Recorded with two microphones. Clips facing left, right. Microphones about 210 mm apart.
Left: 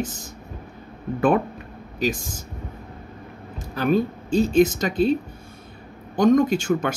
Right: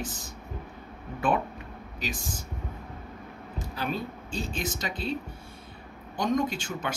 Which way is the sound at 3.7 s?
50° left (ahead or behind).